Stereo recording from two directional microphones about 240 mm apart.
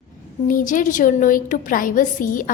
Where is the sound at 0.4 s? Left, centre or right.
Left.